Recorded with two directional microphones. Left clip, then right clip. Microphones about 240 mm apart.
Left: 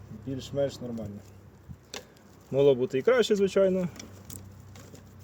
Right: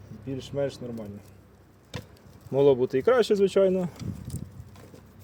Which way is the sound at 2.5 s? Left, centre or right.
Centre.